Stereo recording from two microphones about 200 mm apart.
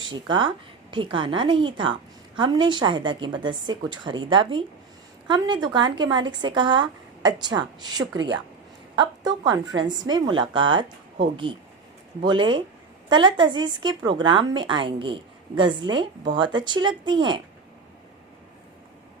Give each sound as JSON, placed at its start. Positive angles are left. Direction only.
{"t": 0.1, "sound": "a woman's voice", "side_deg": -25}